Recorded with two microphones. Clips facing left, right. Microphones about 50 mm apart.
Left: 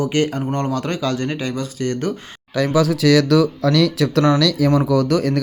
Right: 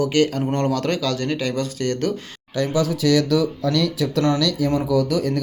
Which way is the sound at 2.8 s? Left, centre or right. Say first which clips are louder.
Left 4 dB; left.